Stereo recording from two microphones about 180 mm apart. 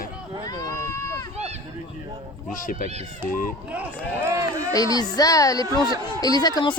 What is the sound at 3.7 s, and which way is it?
Run, 10° right (ahead or behind).